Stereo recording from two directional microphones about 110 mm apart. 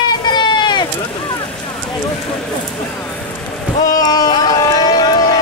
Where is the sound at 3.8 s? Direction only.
35° left (ahead or behind).